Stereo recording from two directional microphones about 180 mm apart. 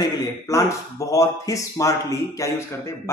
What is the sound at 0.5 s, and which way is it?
Speech, 15° left (ahead or behind).